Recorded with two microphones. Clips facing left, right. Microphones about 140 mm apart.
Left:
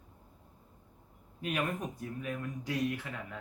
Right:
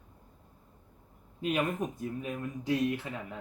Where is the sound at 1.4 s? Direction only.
25° right (ahead or behind).